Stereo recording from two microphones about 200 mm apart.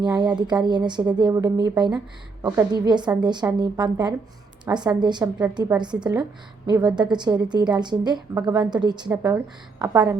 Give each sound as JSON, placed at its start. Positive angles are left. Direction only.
{"t": 0.0, "sound": "a woman's voice", "side_deg": -20}